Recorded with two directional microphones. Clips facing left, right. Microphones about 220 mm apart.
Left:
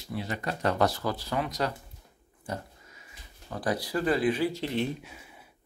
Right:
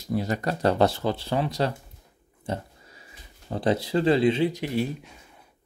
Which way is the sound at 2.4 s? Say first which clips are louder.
Right 5 dB; 30° right (ahead or behind).